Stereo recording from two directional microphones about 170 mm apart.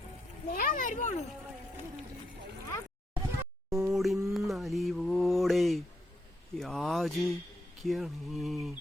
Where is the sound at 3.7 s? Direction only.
5° right (ahead or behind).